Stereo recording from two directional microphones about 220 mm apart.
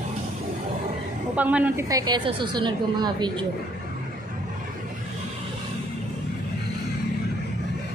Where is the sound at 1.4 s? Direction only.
5° right (ahead or behind).